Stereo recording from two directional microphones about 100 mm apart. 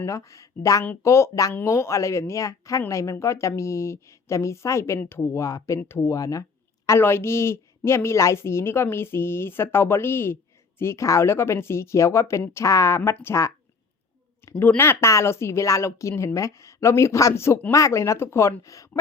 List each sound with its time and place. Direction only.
0.0 s a woman's voice: 30° left (ahead or behind)
14.6 s a woman's voice: 20° left (ahead or behind)